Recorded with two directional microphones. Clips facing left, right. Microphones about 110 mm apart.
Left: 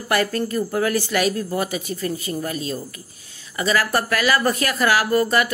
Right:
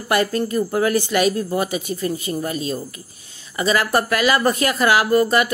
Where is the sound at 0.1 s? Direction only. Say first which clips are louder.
Right 2 dB; 20° right (ahead or behind).